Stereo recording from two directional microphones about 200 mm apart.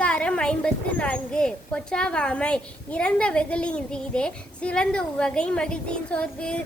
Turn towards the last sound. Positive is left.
turn(degrees=5)  # may be behind; listen again after turning